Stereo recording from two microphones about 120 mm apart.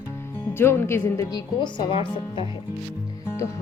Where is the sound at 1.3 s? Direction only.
40° left (ahead or behind).